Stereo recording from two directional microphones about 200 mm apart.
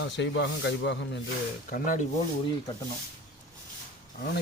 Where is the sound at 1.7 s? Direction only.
40° left (ahead or behind).